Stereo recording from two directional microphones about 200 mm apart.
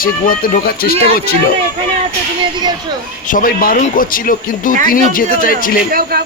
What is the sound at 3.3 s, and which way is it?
Speech, 45° left (ahead or behind).